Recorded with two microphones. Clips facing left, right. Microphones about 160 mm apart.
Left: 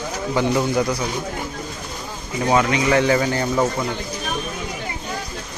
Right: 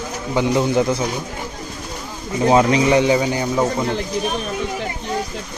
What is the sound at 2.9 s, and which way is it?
Speech, 15° right (ahead or behind).